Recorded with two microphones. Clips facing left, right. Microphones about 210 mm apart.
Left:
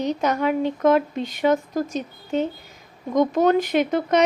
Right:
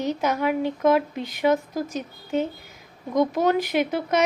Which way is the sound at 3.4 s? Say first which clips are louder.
Left 3 dB; 15° right (ahead or behind).